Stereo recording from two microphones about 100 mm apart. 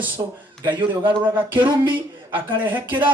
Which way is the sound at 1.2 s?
20° right (ahead or behind).